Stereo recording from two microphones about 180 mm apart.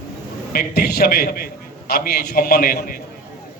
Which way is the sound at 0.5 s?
60° left (ahead or behind).